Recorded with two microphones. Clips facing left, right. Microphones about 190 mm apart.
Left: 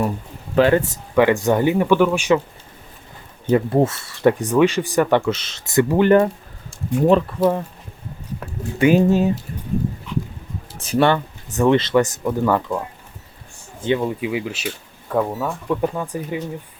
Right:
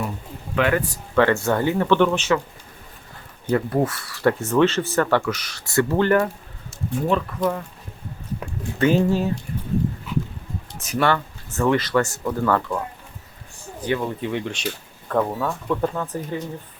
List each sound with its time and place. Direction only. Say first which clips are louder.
0.5 s speech: left 6 dB; 30° left (ahead or behind)
1.1 s speech: left 3 dB; 15° left (ahead or behind)
3.5 s speech: left 4 dB; 25° left (ahead or behind)
8.8 s speech: left 4 dB; 15° left (ahead or behind)
10.1 s a sound: left 1 dB; 5° right (ahead or behind)
10.8 s speech: left 4 dB; 30° left (ahead or behind)
13.8 s speech: left 4 dB; 20° left (ahead or behind)
14.2 s speech: left 2 dB; 5° left (ahead or behind)